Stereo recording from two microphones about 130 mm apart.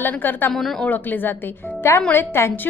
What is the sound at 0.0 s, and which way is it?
Speech, 15° left (ahead or behind).